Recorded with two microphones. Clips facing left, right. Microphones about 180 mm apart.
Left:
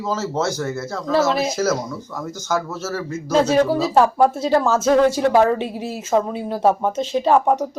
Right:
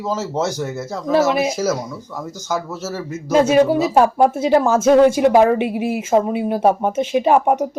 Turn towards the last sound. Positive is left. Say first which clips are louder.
# right 2 dB
turn(degrees=-10)  # may be behind; listen again after turning